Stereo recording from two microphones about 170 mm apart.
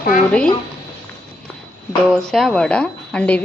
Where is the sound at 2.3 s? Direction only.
Centre (ahead or behind).